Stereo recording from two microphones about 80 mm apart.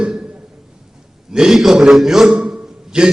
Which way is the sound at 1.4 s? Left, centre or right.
Centre.